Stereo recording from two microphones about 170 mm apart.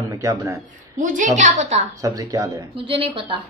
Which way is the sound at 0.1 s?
20° right (ahead or behind).